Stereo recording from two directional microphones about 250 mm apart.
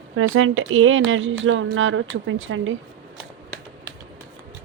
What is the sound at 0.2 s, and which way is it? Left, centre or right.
Speech, right.